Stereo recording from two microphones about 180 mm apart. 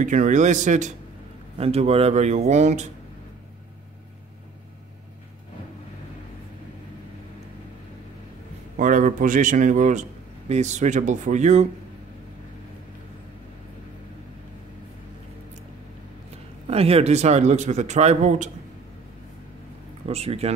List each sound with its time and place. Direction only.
0.0 s a man's voice: 45° right (ahead or behind)
8.7 s a man's voice: 45° right (ahead or behind)
16.6 s a man's voice: 35° right (ahead or behind)
20.1 s a man's voice: 35° right (ahead or behind)